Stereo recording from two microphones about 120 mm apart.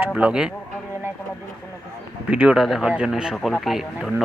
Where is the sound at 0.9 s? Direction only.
20° right (ahead or behind).